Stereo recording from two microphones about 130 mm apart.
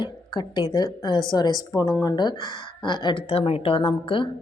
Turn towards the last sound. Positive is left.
turn(degrees=40)  # may be behind; listen again after turning